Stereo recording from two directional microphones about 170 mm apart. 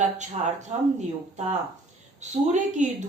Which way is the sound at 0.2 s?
45° right (ahead or behind).